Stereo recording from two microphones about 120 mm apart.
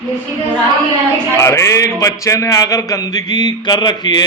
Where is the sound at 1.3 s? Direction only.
25° left (ahead or behind).